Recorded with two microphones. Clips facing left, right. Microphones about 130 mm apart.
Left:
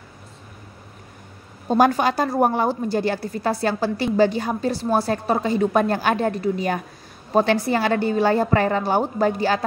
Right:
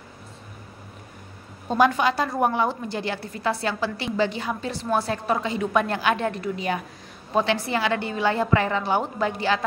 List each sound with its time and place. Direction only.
1.7 s a woman's voice: 40° left (ahead or behind)